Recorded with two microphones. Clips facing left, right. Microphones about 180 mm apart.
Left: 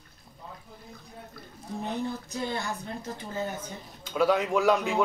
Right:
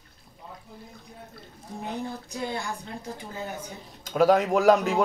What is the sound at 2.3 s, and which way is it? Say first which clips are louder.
Speech: even; 15° right (ahead or behind).